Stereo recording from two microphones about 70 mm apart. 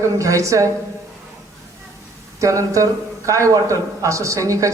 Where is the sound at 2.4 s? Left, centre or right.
Right.